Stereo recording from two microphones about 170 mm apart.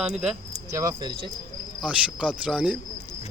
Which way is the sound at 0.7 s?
20° right (ahead or behind).